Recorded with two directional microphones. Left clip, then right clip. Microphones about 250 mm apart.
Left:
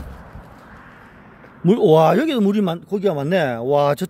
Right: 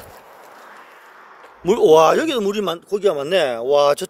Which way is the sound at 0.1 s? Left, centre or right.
Right.